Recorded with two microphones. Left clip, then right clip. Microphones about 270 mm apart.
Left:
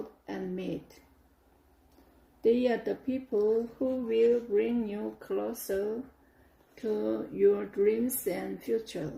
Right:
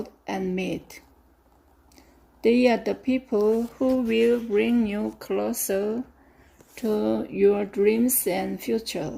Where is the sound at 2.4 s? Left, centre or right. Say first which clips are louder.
Right 6 dB; right.